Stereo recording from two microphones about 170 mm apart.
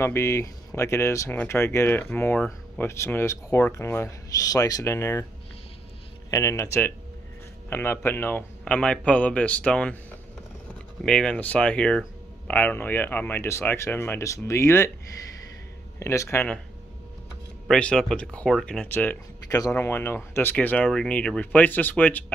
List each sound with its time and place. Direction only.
0.0 s speech: 15° left (ahead or behind)
6.3 s speech: 20° left (ahead or behind)
11.0 s speech: 5° left (ahead or behind)
16.0 s speech: 15° left (ahead or behind)
17.6 s speech: 5° left (ahead or behind)